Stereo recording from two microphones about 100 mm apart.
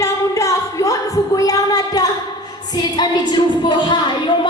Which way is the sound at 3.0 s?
45° left (ahead or behind).